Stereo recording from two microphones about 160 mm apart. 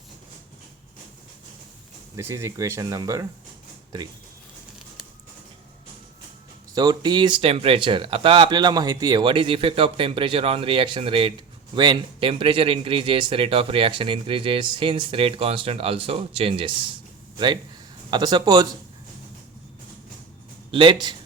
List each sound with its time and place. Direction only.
2.1 s speech: 20° right (ahead or behind)
6.7 s speech: 25° right (ahead or behind)
18.1 s speech: 25° right (ahead or behind)
20.7 s speech: 30° right (ahead or behind)